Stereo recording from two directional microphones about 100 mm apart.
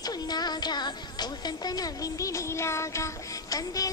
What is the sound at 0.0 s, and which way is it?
Music, 45° left (ahead or behind).